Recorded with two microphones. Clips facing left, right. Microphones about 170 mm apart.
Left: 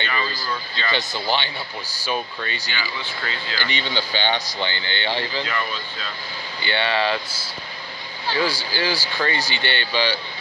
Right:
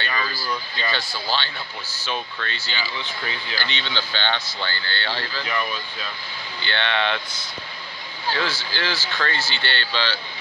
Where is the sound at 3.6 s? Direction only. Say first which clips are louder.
Left 5 dB; 10° left (ahead or behind).